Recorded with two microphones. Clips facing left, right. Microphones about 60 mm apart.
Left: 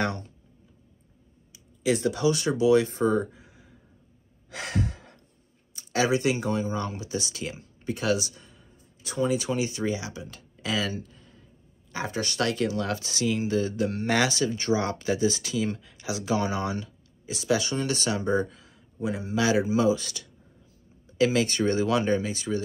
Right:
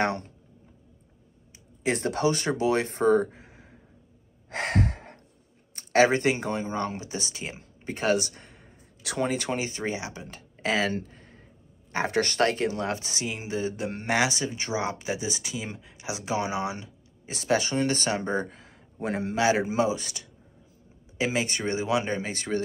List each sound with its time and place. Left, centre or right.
1.5 s speech: right
4.5 s gasp: right
5.8 s speech: right
9.3 s speech: right
17.3 s speech: right
19.3 s speech: right
22.3 s speech: right